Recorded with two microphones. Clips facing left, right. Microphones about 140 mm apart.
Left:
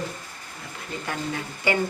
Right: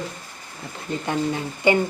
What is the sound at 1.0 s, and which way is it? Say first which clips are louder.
Speech: right 6 dB; 25° right (ahead or behind).